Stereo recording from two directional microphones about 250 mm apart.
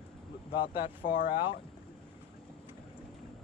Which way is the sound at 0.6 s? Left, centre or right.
Left.